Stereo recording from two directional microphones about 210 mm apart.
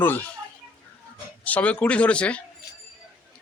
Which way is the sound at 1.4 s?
5° left (ahead or behind).